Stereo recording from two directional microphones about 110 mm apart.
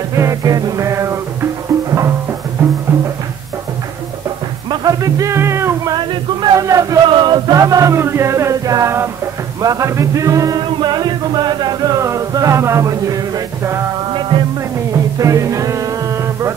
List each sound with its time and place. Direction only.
0.1 s music: 25° right (ahead or behind)
4.6 s music: 30° right (ahead or behind)
5.9 s a sound: 35° right (ahead or behind)
7.1 s music: 40° right (ahead or behind)
10.7 s a sound: 40° right (ahead or behind)
15.1 s music: 30° right (ahead or behind)